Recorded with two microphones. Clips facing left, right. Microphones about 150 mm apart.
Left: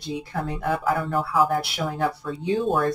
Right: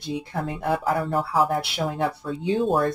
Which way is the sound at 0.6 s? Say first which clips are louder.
Even; 35° right (ahead or behind).